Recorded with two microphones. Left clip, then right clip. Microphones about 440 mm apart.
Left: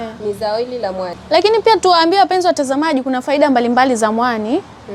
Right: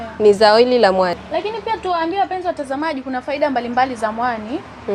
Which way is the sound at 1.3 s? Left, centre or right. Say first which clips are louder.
Left 10 dB; left.